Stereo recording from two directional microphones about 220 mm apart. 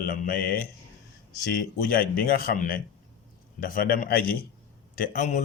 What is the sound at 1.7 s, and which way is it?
Speech, 40° left (ahead or behind).